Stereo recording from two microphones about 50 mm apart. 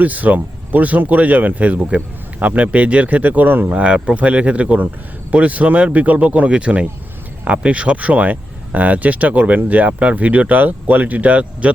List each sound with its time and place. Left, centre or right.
0.0 s speech: right
3.8 s speech: right